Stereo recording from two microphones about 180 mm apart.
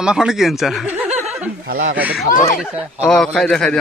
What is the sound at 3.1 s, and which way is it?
Speech, 5° left (ahead or behind).